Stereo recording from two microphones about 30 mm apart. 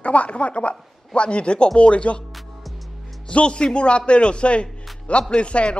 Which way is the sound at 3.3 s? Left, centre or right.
Left.